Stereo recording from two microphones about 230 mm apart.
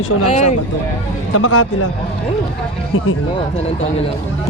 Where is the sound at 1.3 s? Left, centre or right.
Left.